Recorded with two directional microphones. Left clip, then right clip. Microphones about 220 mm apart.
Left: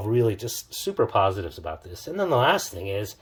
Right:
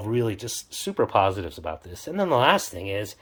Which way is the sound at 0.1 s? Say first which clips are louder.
Left 3 dB; 5° right (ahead or behind).